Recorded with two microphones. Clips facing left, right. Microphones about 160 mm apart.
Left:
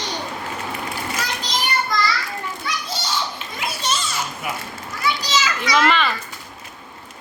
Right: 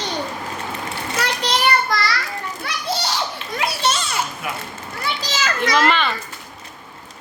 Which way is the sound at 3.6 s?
65° right (ahead or behind).